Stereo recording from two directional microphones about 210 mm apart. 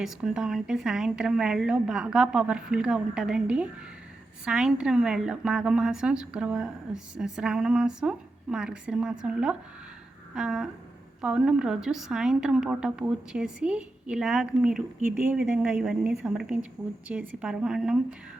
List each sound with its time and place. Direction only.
0.0 s a woman's voice: 5° right (ahead or behind)